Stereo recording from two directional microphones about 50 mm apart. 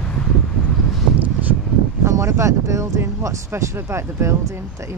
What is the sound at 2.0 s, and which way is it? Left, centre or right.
Speech, right.